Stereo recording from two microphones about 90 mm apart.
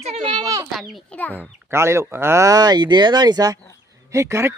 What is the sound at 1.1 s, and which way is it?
Speech, 15° left (ahead or behind).